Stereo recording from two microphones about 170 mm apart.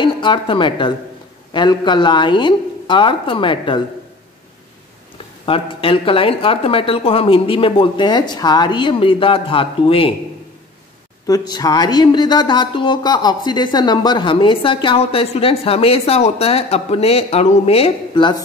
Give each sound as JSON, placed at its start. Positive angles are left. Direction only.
{"t": 0.0, "sound": "a woman's voice", "side_deg": 30}
{"t": 5.4, "sound": "speech", "side_deg": 30}
{"t": 11.2, "sound": "speech", "side_deg": 20}